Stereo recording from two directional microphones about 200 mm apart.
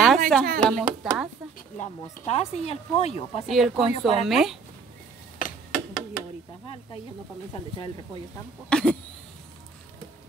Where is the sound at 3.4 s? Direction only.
Centre (ahead or behind).